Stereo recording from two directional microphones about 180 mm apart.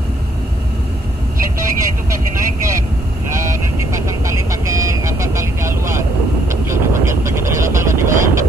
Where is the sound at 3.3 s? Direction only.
15° right (ahead or behind).